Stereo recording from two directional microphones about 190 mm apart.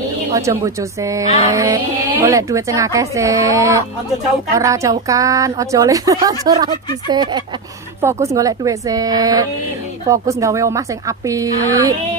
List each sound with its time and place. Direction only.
0.3 s a woman's voice: 15° right (ahead or behind)